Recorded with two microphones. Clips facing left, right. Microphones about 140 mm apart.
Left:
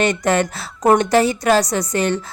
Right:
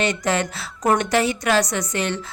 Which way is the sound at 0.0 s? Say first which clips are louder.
Left 4 dB; 50° left (ahead or behind).